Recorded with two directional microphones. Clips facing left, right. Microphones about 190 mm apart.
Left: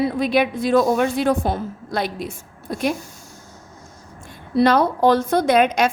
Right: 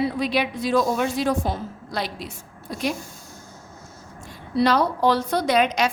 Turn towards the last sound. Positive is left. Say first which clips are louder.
# left 4 dB
turn(degrees=50)  # may be behind; listen again after turning